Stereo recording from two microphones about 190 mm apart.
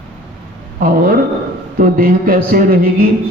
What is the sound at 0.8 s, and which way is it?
A man's voice, 50° right (ahead or behind).